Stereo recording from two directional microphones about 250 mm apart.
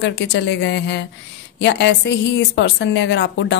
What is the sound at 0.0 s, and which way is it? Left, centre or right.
A woman's voice, left.